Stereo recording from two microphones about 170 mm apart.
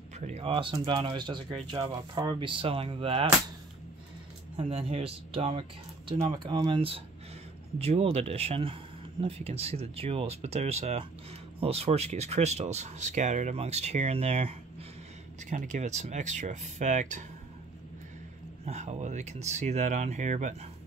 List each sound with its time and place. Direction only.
0.3 s speech: 35° right (ahead or behind)
4.6 s speech: 35° right (ahead or behind)
15.5 s speech: 45° right (ahead or behind)
18.7 s speech: 40° right (ahead or behind)